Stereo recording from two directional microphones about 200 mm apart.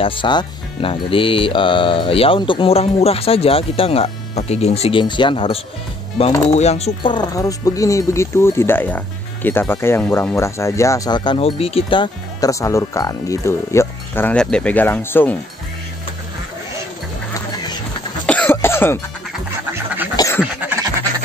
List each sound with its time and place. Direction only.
0.0 s speech: 25° left (ahead or behind)
18.2 s cough: 5° left (ahead or behind)
20.2 s duck: 15° left (ahead or behind)
20.6 s a sound: 10° right (ahead or behind)